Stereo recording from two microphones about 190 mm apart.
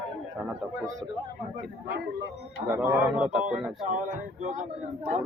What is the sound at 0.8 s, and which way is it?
Speech, 15° right (ahead or behind).